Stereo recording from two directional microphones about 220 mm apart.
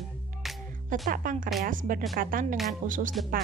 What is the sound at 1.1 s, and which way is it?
Speech, 40° right (ahead or behind).